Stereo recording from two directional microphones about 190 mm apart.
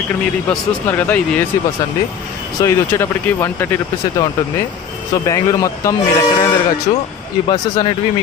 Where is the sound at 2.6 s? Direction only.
15° left (ahead or behind).